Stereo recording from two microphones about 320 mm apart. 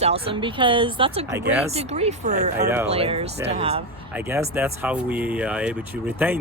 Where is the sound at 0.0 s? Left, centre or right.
Centre.